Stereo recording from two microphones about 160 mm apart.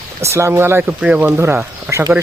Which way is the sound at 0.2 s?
15° right (ahead or behind).